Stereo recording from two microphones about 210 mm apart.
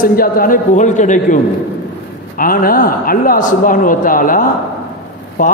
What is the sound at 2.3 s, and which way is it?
Speech, 45° left (ahead or behind).